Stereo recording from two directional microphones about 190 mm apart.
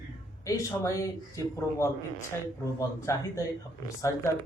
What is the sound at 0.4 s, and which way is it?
A man's voice, 15° left (ahead or behind).